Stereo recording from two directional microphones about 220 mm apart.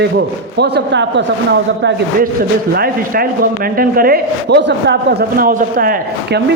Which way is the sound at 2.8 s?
40° right (ahead or behind).